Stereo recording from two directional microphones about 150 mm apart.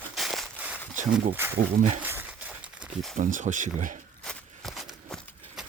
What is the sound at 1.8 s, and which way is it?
Speech, 55° right (ahead or behind).